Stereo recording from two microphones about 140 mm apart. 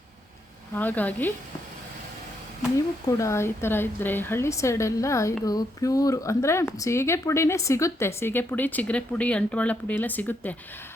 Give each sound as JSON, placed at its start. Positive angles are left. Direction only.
{"t": 0.8, "sound": "speech", "side_deg": 10}
{"t": 2.7, "sound": "speech", "side_deg": 20}